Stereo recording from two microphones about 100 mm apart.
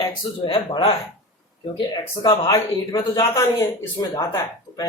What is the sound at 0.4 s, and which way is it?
Speech, 60° left (ahead or behind).